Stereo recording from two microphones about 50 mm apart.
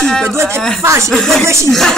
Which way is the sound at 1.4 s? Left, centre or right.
Right.